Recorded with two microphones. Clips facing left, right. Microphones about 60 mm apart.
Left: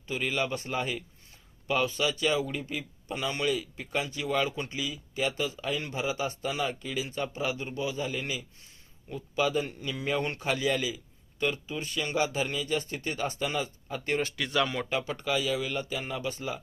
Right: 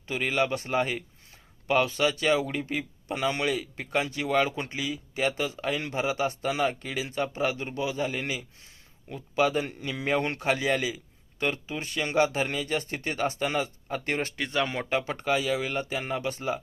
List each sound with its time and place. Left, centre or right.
0.1 s a man's voice: right
14.4 s speech: right
14.7 s a man's voice: right